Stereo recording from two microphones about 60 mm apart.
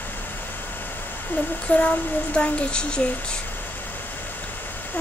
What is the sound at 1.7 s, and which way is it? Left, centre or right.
A child's voice, centre.